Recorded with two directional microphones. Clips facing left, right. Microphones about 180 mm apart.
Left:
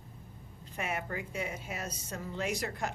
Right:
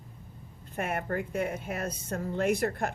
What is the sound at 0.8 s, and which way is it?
Speech, 55° right (ahead or behind).